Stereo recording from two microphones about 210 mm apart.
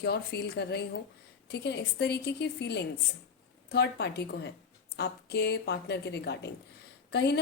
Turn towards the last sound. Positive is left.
turn(degrees=50)  # may be behind; listen again after turning